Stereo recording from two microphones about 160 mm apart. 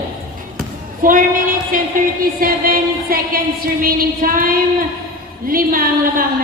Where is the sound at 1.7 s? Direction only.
60° right (ahead or behind).